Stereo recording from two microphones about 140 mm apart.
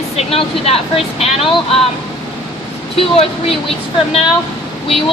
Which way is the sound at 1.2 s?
45° left (ahead or behind).